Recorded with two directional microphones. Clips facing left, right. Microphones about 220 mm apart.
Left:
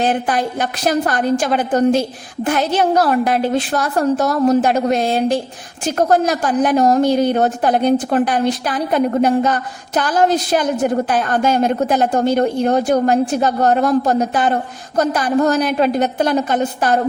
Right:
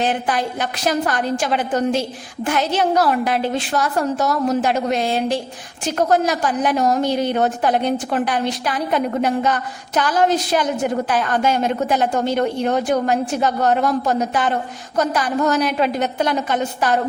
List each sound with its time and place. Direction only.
0.0 s a woman's voice: 45° left (ahead or behind)